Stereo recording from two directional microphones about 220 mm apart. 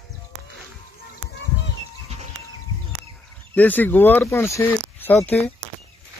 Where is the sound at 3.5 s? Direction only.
5° left (ahead or behind).